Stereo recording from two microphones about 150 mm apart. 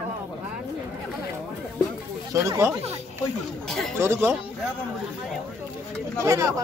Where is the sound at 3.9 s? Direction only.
15° right (ahead or behind).